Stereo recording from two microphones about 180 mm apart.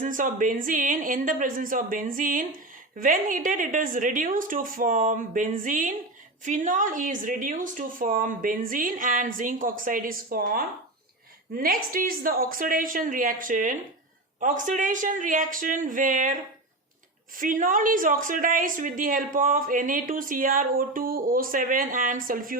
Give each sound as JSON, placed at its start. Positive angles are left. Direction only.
{"t": 0.0, "sound": "a woman's voice", "side_deg": -45}